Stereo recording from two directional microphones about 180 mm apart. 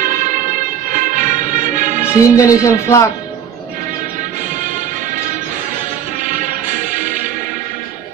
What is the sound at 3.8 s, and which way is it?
Music, 45° right (ahead or behind).